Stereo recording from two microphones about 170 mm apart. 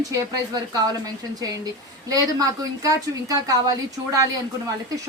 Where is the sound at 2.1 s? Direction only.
20° right (ahead or behind).